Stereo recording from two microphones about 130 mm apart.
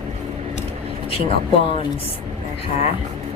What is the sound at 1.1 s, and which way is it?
Speech, 45° left (ahead or behind).